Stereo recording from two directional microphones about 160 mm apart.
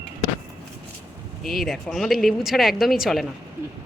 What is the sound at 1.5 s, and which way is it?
Speech, centre (ahead or behind).